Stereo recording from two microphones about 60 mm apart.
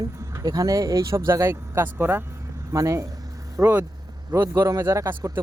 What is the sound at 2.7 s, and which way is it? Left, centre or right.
A man's voice, right.